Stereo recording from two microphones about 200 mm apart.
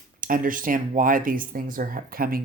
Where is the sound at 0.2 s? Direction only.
45° right (ahead or behind).